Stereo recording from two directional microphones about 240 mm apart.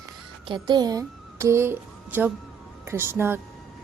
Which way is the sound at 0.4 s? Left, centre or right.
Centre.